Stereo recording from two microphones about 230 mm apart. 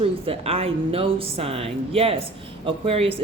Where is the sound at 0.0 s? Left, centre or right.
Right.